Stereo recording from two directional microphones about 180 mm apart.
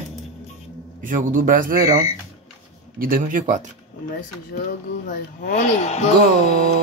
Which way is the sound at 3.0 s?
50° right (ahead or behind).